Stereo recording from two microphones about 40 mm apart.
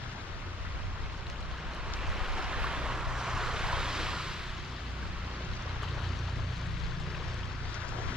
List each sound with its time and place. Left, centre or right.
2.1 s vehicle: centre